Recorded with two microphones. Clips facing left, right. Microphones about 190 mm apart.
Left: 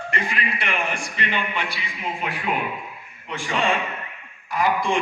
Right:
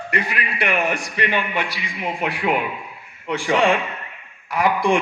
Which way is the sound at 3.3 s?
70° right (ahead or behind).